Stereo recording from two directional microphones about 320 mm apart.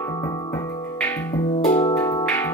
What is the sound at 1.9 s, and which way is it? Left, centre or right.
Music, centre.